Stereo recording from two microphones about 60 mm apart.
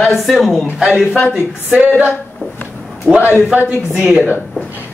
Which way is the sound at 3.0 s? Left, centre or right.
Right.